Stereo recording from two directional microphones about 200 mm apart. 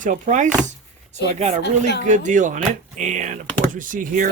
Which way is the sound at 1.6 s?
55° left (ahead or behind).